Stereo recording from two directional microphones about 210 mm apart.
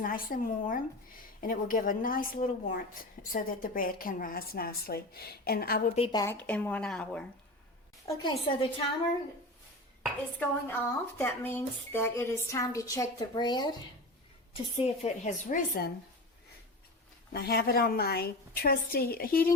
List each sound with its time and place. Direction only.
0.0 s a woman's voice: 40° left (ahead or behind)
6.0 s a woman's voice: 20° left (ahead or behind)
6.3 s speech: 5° left (ahead or behind)
8.0 s speech: 15° left (ahead or behind)
10.4 s speech: 10° left (ahead or behind); by 15.9 s 40° left (ahead or behind)
17.3 s a woman's voice: 50° left (ahead or behind)